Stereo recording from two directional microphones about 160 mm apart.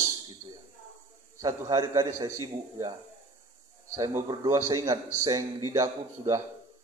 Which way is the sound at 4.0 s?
15° right (ahead or behind).